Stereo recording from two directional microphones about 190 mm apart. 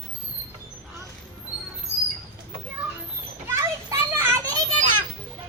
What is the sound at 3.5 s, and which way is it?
Children playing, 15° right (ahead or behind).